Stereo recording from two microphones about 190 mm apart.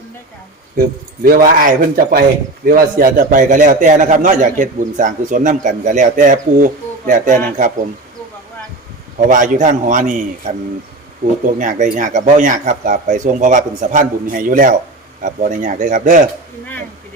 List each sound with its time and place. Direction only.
1.2 s a man's voice: 45° right (ahead or behind)
9.3 s a man's voice: 45° right (ahead or behind)
11.6 s a man's voice: 40° right (ahead or behind)